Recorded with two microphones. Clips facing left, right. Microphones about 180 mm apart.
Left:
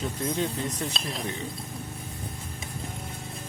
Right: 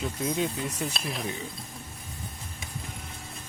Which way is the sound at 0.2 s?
10° right (ahead or behind).